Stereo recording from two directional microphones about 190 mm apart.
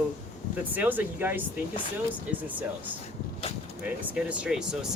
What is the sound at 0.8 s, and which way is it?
Speech, 10° right (ahead or behind).